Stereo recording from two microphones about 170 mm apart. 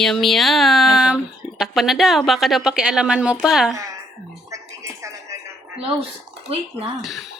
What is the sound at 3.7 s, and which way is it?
Speech, 20° right (ahead or behind).